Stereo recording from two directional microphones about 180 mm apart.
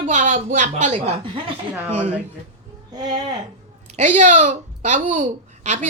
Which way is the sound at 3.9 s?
40° right (ahead or behind).